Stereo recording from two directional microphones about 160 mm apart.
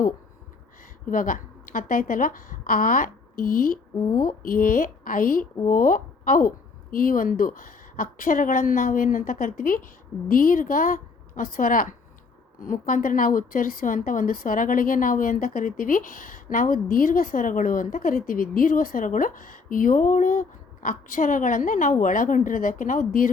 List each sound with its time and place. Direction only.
1.1 s a woman's voice: 60° left (ahead or behind)